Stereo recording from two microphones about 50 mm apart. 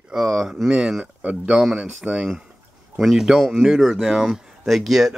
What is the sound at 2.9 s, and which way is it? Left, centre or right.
Speech, centre.